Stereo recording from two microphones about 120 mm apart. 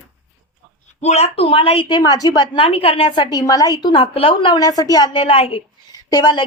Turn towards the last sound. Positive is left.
turn(degrees=35)  # may be behind; listen again after turning